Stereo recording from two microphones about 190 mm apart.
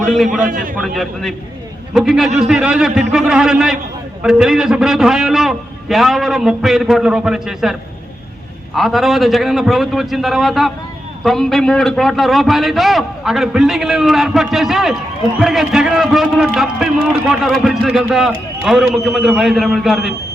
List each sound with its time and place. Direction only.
0.4 s a man's voice: 45° right (ahead or behind)
0.8 s a man's voice: centre (ahead or behind)